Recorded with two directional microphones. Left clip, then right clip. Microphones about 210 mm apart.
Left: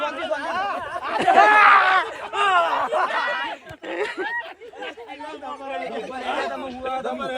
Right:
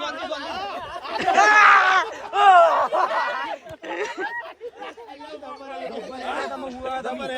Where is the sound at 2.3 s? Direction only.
45° right (ahead or behind).